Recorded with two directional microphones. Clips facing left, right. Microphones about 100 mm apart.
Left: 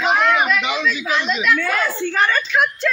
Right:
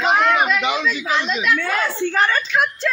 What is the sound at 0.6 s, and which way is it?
A man's voice, 30° right (ahead or behind).